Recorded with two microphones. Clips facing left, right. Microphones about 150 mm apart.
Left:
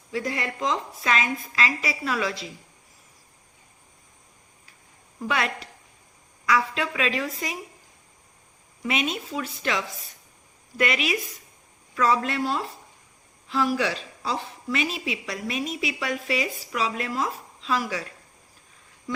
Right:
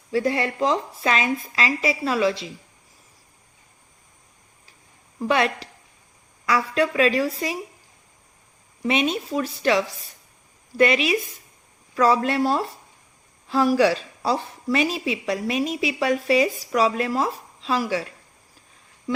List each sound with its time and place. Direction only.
0.1 s a woman's voice: 30° right (ahead or behind)
5.3 s a woman's voice: 30° right (ahead or behind)
8.8 s a woman's voice: 30° right (ahead or behind)